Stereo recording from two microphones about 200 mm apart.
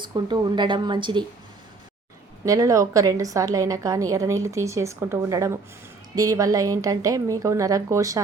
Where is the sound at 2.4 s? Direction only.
15° right (ahead or behind).